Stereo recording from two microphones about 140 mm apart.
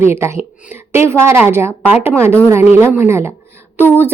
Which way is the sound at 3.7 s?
15° left (ahead or behind).